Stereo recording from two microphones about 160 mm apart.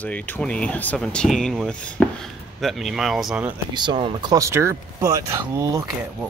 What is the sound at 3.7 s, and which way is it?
Speech, 30° right (ahead or behind).